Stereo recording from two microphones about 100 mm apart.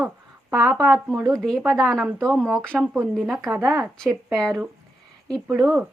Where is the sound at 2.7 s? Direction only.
10° right (ahead or behind).